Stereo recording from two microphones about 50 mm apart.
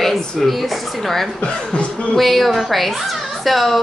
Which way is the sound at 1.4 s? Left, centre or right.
Left.